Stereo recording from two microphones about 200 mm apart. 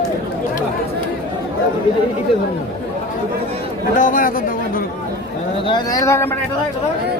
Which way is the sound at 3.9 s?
40° left (ahead or behind).